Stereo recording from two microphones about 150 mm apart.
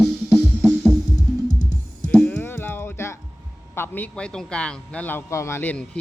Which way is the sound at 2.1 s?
10° left (ahead or behind).